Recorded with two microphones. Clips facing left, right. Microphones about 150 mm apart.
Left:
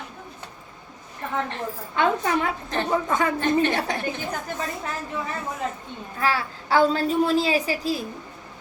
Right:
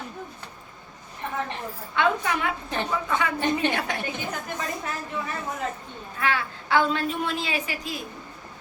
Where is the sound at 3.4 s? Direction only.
15° right (ahead or behind).